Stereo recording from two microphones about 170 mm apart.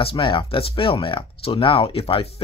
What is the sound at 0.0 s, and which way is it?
Speech, 30° left (ahead or behind).